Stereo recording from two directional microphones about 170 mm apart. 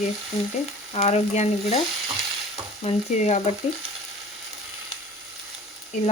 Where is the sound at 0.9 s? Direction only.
40° left (ahead or behind).